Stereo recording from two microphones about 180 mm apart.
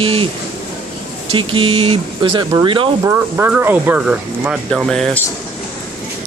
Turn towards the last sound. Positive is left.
turn(degrees=0)  # may be behind; listen again after turning